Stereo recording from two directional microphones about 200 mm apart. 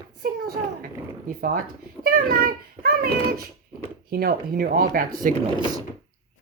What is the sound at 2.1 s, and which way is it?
Child singing, 50° right (ahead or behind).